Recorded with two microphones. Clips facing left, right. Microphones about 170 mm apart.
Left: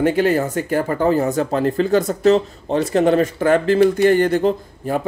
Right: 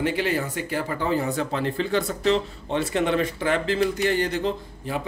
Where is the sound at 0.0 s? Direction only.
45° left (ahead or behind).